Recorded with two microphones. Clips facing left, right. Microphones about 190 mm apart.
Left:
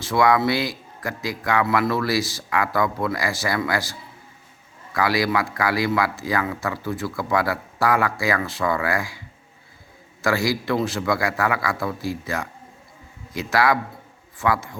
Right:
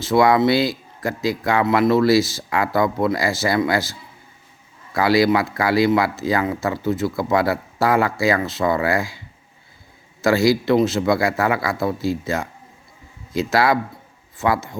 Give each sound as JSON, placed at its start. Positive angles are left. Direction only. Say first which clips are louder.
{"t": 0.0, "sound": "speech", "louder": "right 4 dB", "side_deg": -25}
{"t": 4.9, "sound": "speech", "louder": "right 5 dB", "side_deg": -25}